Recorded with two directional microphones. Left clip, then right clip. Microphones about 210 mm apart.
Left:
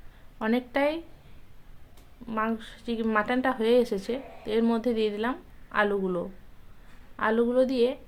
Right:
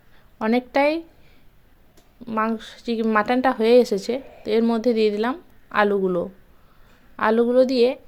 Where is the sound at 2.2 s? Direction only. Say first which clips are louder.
Right 6 dB; 30° right (ahead or behind).